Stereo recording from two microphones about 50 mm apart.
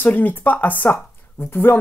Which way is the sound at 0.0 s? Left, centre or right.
Left.